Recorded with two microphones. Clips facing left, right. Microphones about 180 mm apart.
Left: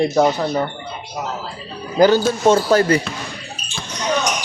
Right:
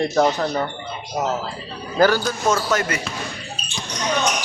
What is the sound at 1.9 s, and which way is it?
Speech, 20° left (ahead or behind).